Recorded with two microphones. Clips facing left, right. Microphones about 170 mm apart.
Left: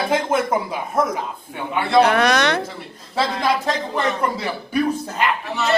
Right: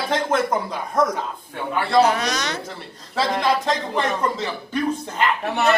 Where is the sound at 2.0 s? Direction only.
60° left (ahead or behind).